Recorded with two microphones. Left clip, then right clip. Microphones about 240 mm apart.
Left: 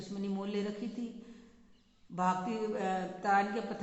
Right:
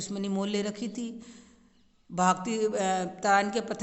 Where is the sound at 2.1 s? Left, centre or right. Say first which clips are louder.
Right 6 dB; right.